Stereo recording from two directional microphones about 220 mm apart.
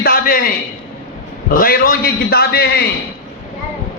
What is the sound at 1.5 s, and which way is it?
A man's voice, 40° left (ahead or behind).